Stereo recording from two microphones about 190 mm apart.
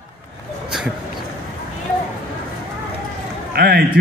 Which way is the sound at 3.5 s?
55° right (ahead or behind).